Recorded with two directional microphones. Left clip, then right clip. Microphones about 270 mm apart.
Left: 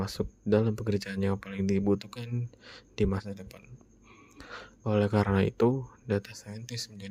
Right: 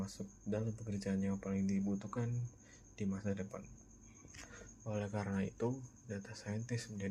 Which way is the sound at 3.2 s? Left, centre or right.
Centre.